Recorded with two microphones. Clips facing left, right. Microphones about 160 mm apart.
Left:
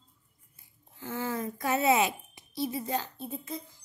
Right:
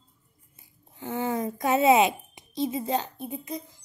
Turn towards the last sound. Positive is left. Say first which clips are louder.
# right 3 dB
turn(degrees=-20)  # may be behind; listen again after turning